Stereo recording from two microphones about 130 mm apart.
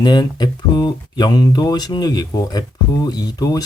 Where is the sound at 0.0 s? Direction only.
30° left (ahead or behind).